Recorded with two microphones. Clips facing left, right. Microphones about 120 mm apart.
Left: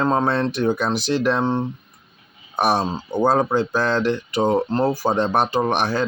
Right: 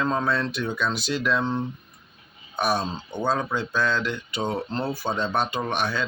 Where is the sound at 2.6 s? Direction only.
45° left (ahead or behind).